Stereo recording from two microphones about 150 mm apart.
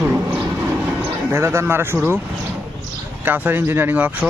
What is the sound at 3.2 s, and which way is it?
A man's voice, 10° right (ahead or behind).